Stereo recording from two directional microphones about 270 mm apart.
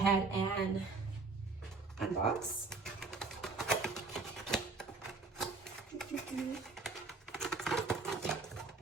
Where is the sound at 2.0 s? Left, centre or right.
Centre.